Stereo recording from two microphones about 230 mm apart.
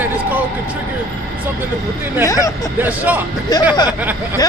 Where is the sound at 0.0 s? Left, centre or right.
Centre.